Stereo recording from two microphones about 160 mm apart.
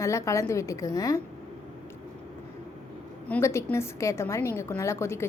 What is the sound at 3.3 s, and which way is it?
A woman's voice, 15° left (ahead or behind).